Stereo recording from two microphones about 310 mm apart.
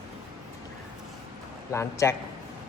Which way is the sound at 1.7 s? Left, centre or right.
Centre.